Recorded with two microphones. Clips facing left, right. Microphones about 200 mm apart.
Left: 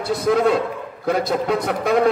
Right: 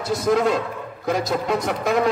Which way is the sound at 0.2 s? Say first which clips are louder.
Left 2 dB; 55° left (ahead or behind).